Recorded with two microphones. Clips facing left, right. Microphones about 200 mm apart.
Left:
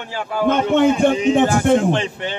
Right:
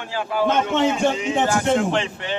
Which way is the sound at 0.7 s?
55° left (ahead or behind).